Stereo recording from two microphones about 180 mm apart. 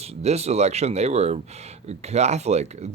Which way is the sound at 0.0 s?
35° right (ahead or behind).